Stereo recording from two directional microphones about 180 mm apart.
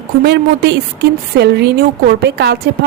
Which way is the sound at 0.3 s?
65° right (ahead or behind).